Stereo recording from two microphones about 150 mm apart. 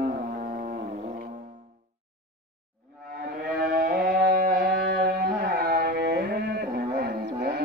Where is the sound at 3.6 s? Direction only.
70° right (ahead or behind).